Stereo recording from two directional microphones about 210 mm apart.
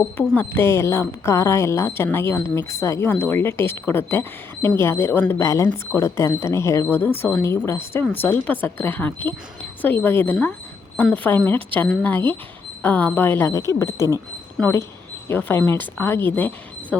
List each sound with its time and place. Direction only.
0.2 s speech: 10° left (ahead or behind)